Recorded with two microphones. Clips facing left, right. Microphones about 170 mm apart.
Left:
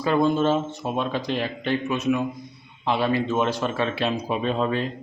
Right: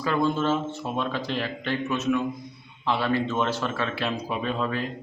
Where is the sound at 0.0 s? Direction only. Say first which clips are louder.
Left 4 dB; 20° left (ahead or behind).